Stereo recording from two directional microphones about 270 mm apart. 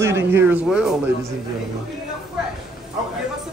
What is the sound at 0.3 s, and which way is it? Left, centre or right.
Speech, centre.